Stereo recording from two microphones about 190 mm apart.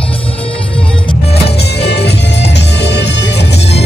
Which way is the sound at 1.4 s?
60° left (ahead or behind).